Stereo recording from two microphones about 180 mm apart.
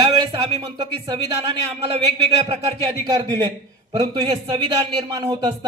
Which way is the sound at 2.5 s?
20° right (ahead or behind).